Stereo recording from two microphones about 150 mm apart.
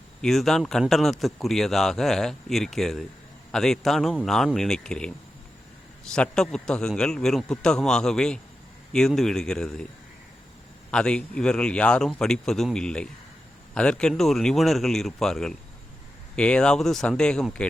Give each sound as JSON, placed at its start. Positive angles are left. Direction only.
{"t": 0.2, "sound": "speech", "side_deg": 0}
{"t": 10.9, "sound": "speech", "side_deg": 5}